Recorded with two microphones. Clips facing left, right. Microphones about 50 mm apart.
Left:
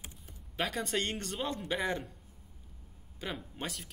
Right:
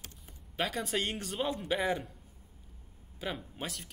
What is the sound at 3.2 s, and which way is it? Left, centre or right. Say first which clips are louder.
Speech: right 1 dB; centre.